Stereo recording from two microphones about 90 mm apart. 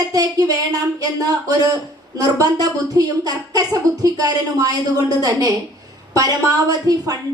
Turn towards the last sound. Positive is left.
turn(degrees=-45)  # may be behind; listen again after turning